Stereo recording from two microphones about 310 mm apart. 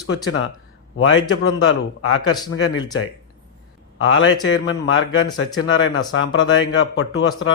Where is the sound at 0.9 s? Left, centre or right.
Left.